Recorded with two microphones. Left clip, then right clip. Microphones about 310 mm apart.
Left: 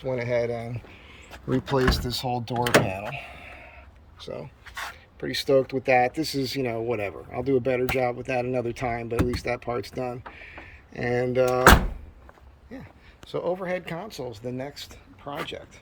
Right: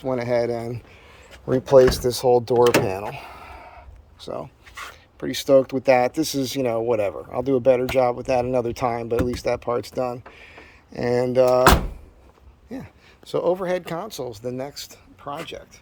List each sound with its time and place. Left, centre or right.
0.0 s speech: centre
1.8 s speech: right
3.4 s a sound: right
5.2 s speech: centre
12.7 s speech: right; by 15.6 s centre